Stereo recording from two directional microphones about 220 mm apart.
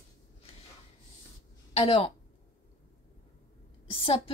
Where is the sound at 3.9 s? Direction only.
25° left (ahead or behind).